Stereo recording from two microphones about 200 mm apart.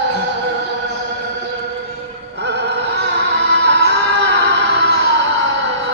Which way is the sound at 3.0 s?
60° right (ahead or behind).